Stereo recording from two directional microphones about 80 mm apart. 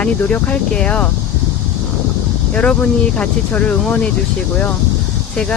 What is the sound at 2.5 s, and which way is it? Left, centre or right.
Speech, centre.